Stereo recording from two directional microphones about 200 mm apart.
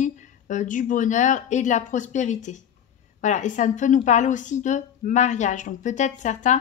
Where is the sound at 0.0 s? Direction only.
40° left (ahead or behind).